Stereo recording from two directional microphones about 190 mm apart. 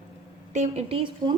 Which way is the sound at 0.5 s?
35° right (ahead or behind).